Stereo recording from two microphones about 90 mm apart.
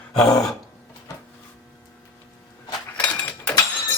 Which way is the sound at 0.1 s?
5° left (ahead or behind).